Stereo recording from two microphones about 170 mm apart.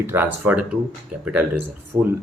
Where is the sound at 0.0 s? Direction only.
15° right (ahead or behind).